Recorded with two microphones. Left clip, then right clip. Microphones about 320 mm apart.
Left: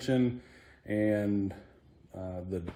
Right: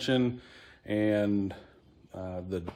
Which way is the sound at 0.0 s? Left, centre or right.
Centre.